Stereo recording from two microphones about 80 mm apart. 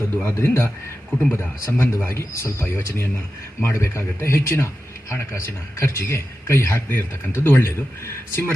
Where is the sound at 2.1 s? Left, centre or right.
Left.